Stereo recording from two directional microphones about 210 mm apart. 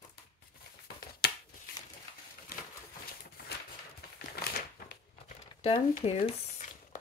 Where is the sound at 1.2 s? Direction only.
50° left (ahead or behind).